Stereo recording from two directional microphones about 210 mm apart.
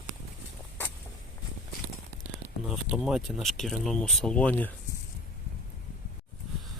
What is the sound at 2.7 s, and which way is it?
Speech, 5° right (ahead or behind).